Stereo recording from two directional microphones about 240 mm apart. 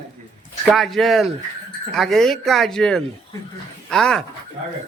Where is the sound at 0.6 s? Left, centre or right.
Centre.